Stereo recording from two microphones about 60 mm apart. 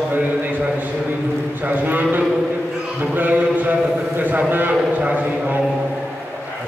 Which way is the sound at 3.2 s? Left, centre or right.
Right.